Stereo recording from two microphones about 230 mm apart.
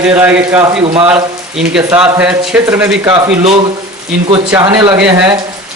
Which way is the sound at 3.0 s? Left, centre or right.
Centre.